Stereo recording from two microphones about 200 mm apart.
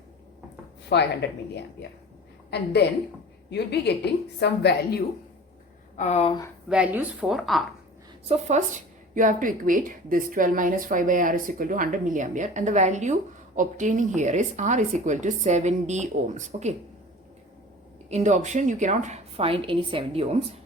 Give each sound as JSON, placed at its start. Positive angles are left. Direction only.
{"t": 0.9, "sound": "a woman's voice", "side_deg": 60}
{"t": 2.8, "sound": "a woman's voice", "side_deg": 55}
{"t": 6.0, "sound": "speech", "side_deg": 35}
{"t": 6.7, "sound": "speech", "side_deg": -5}
{"t": 8.3, "sound": "a woman's voice", "side_deg": -35}
{"t": 18.1, "sound": "a woman's voice", "side_deg": -35}